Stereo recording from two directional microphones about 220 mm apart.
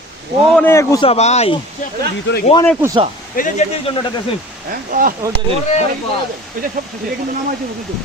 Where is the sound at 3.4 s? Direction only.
35° left (ahead or behind).